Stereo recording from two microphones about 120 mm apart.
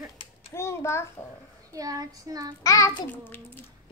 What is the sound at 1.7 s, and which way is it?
Speech, 30° right (ahead or behind).